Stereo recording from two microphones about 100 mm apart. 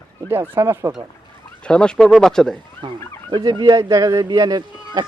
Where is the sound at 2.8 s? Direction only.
50° right (ahead or behind).